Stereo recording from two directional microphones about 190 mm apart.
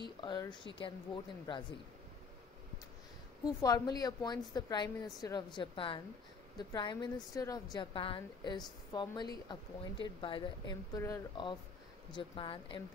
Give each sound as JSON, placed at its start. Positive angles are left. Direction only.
{"t": 0.0, "sound": "a woman's voice", "side_deg": 25}
{"t": 3.4, "sound": "a woman's voice", "side_deg": 20}